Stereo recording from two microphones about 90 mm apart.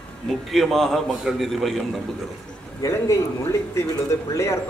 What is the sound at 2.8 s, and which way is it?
Speech, 35° left (ahead or behind).